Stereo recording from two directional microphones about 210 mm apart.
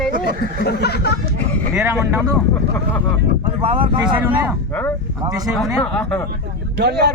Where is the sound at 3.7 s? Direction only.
25° right (ahead or behind).